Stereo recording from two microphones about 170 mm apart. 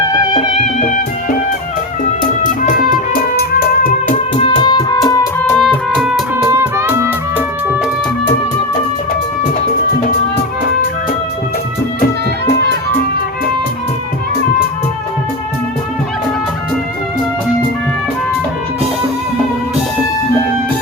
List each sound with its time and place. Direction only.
0.1 s music: 25° left (ahead or behind)
2.4 s music: 50° left (ahead or behind)
4.4 s music: 30° left (ahead or behind)
5.4 s music: 5° left (ahead or behind)
6.5 s music: 15° right (ahead or behind)